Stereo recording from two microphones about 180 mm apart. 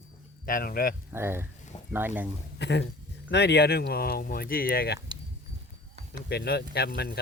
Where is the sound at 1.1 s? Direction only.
10° right (ahead or behind).